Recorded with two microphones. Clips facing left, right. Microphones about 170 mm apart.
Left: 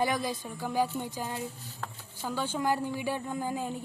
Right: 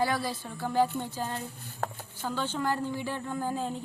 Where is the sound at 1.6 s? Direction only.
50° right (ahead or behind).